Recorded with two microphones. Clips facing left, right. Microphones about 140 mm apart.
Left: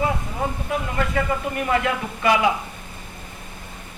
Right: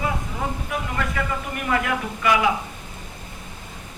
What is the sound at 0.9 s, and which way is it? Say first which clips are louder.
Speech: left 4 dB; 30° left (ahead or behind).